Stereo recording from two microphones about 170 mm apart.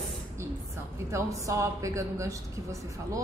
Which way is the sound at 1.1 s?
20° right (ahead or behind).